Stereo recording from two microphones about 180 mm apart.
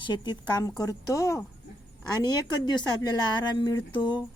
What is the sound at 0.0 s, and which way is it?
Speech, 25° left (ahead or behind).